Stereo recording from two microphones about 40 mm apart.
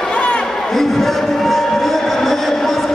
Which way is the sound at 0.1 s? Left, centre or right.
Left.